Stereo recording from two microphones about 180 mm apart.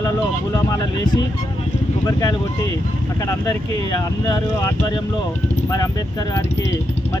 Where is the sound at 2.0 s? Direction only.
20° left (ahead or behind).